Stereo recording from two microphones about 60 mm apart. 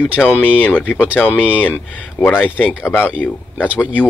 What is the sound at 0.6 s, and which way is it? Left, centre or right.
Speech, left.